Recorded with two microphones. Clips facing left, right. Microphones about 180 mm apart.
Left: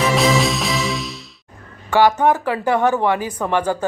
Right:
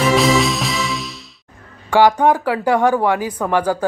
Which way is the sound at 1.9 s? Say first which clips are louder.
Right 2 dB; 15° right (ahead or behind).